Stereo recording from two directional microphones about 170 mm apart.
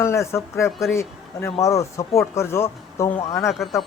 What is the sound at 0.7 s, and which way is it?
Speech, centre (ahead or behind).